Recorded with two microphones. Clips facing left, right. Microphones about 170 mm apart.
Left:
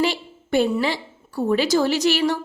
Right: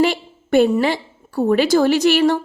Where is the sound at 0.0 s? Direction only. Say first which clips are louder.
Right 5 dB; 55° right (ahead or behind).